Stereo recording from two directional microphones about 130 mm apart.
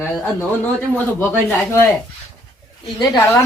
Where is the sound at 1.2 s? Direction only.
15° left (ahead or behind).